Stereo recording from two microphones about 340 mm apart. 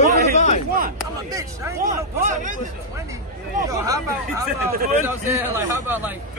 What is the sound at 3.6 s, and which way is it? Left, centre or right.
A man's voice, centre.